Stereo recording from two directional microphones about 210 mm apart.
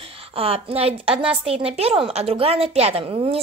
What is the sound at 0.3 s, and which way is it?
A woman's voice, 25° right (ahead or behind).